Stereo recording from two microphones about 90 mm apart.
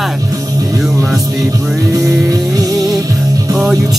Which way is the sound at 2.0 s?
40° right (ahead or behind).